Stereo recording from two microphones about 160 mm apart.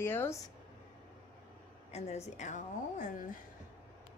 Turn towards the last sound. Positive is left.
turn(degrees=50)  # may be behind; listen again after turning